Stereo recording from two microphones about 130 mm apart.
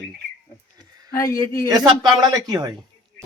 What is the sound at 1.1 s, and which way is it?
Speech, 25° left (ahead or behind).